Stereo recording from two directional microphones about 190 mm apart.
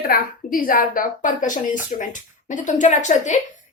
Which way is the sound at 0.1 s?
50° left (ahead or behind).